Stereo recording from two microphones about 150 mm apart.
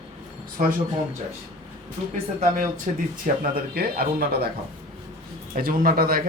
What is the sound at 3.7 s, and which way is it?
Speech, 90° right.